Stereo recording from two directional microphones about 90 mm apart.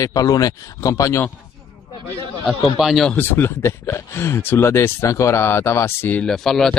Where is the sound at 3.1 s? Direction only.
25° left (ahead or behind).